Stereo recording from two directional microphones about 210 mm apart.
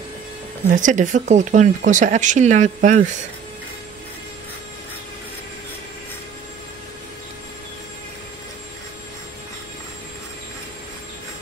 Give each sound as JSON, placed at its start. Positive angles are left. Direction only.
{"t": 0.7, "sound": "speech", "side_deg": -35}